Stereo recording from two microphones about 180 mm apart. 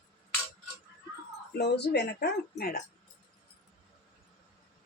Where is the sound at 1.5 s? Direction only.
65° left (ahead or behind).